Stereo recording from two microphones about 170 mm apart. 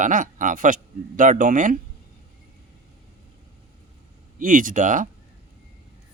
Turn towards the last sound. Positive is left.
turn(degrees=-50)  # may be behind; listen again after turning